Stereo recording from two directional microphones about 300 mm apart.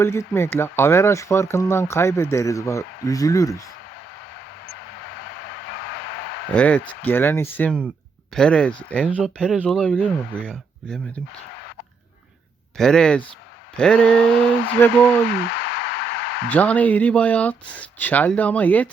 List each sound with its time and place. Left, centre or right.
0.0 s speech: centre
6.5 s speech: centre
12.7 s speech: centre
15.3 s a sound: left
16.5 s speech: centre